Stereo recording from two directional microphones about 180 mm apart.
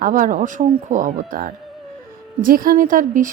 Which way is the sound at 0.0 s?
50° right (ahead or behind).